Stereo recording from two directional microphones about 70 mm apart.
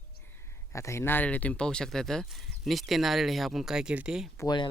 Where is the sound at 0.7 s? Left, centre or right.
Left.